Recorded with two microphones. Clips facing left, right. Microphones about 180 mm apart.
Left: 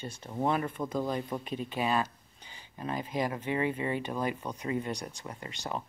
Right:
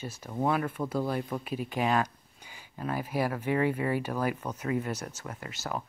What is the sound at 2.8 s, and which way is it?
Speech, 20° left (ahead or behind).